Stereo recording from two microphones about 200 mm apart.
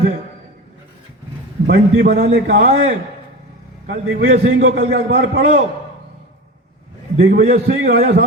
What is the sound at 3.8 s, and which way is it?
Speech, 40° right (ahead or behind).